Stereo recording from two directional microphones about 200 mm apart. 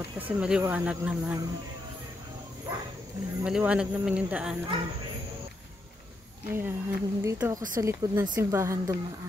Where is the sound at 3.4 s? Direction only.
5° right (ahead or behind).